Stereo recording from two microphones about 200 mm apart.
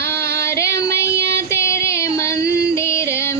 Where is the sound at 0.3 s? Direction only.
15° left (ahead or behind).